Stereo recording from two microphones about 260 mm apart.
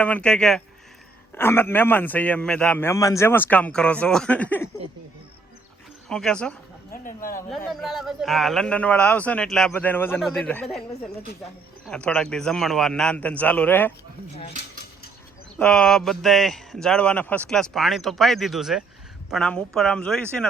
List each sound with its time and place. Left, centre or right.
0.0 s a man's voice: centre
6.1 s a man's voice: centre
6.9 s speech: left
7.3 s a man's voice: centre
11.9 s a man's voice: centre
15.5 s a man's voice: centre